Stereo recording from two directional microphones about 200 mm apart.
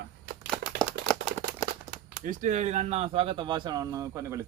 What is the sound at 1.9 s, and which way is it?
Speech, 45° right (ahead or behind).